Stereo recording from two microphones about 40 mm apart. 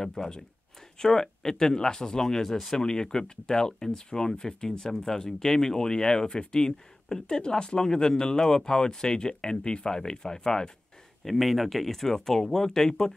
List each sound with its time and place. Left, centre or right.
0.0 s speech: centre
11.2 s speech: centre